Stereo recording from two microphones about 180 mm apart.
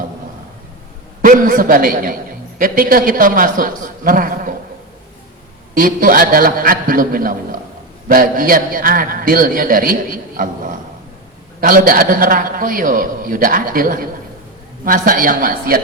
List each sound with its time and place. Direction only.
1.2 s a man's voice: 50° right (ahead or behind)
5.7 s a man's voice: 50° right (ahead or behind)